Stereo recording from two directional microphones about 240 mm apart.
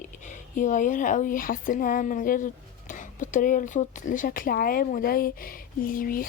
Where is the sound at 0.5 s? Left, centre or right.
Left.